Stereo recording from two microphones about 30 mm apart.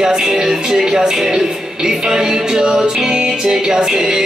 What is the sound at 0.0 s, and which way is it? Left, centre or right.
Speech, centre.